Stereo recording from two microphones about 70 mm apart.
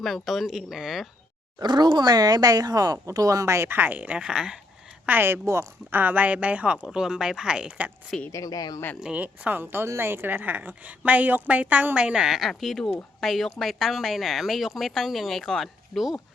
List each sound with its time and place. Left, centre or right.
0.0 s a woman's voice: centre
1.6 s speech: right
3.8 s a woman's voice: right
4.2 s speech: centre
5.0 s a woman's voice: right; by 7.9 s centre
8.3 s speech: left
9.0 s a woman's voice: centre
12.3 s a woman's voice: centre